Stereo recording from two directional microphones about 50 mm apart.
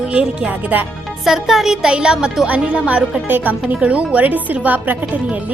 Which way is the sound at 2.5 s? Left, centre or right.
Right.